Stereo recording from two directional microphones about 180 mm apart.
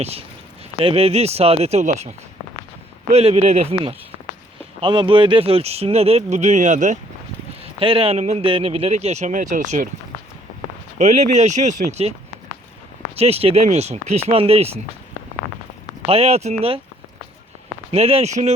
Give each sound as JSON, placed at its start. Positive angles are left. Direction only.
{"t": 0.0, "sound": "speech", "side_deg": -35}
{"t": 3.1, "sound": "speech", "side_deg": -35}
{"t": 7.6, "sound": "speech", "side_deg": -30}
{"t": 10.9, "sound": "speech", "side_deg": -40}
{"t": 13.1, "sound": "speech", "side_deg": -35}
{"t": 16.0, "sound": "speech", "side_deg": -35}
{"t": 17.9, "sound": "speech", "side_deg": -35}